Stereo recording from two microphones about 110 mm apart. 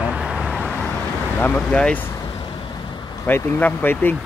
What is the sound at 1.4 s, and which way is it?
Speech, 15° left (ahead or behind).